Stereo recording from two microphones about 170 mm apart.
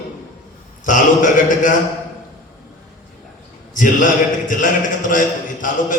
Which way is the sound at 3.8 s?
50° left (ahead or behind).